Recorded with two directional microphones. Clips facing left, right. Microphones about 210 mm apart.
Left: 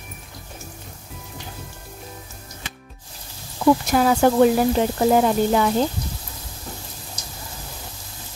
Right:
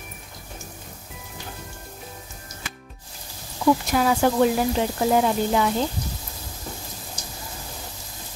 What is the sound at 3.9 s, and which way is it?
Speech, 45° left (ahead or behind).